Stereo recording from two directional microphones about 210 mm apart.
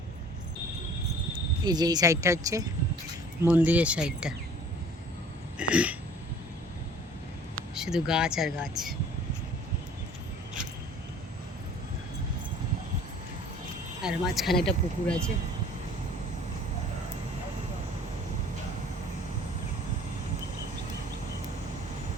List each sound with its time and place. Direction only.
1.6 s speech: 20° right (ahead or behind); by 4.4 s 5° right (ahead or behind)
5.5 s speech: 5° right (ahead or behind)
7.8 s speech: 5° right (ahead or behind)
14.0 s speech: centre (ahead or behind)